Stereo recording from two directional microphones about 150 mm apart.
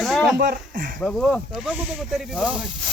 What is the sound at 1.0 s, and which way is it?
Speech, 5° left (ahead or behind).